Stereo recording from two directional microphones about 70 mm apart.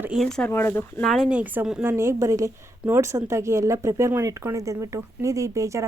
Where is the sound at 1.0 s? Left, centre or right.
Centre.